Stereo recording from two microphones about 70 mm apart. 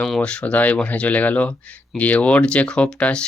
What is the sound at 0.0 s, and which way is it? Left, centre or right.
Speech, centre.